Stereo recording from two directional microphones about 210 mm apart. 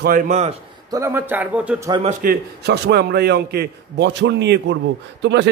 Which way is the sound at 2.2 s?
45° right (ahead or behind).